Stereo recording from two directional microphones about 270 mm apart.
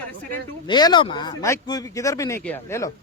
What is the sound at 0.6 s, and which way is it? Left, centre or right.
Speech, centre.